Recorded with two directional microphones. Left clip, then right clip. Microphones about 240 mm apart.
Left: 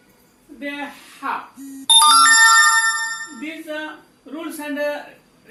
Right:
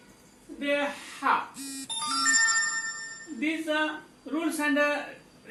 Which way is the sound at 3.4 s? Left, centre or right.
Centre.